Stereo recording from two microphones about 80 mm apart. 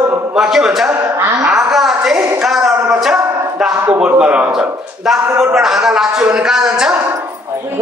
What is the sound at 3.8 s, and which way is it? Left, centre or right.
A man's voice, centre.